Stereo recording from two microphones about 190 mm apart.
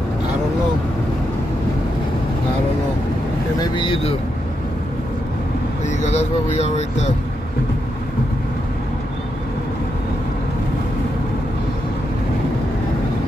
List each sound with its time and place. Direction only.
3.6 s speech: 25° left (ahead or behind)
5.9 s vehicle: 35° left (ahead or behind)